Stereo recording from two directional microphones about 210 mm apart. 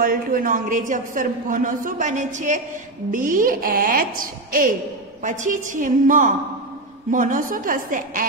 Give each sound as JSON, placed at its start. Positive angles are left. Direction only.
{"t": 0.0, "sound": "a man's voice", "side_deg": -45}